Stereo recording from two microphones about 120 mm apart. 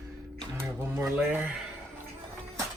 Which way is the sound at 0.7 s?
25° right (ahead or behind).